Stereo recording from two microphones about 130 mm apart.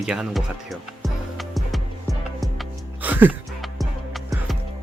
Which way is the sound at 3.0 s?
15° right (ahead or behind).